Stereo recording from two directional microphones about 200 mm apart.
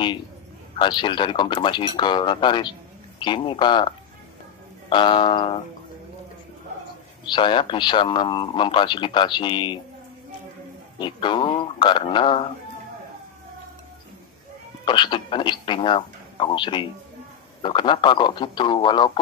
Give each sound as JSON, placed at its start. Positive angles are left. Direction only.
{"t": 0.7, "sound": "a man's voice", "side_deg": 25}
{"t": 7.2, "sound": "a man's voice", "side_deg": 25}
{"t": 11.0, "sound": "a man's voice", "side_deg": 25}
{"t": 14.9, "sound": "a man's voice", "side_deg": 25}